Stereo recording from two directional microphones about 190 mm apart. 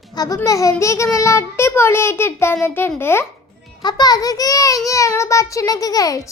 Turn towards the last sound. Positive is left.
turn(degrees=20)  # may be behind; listen again after turning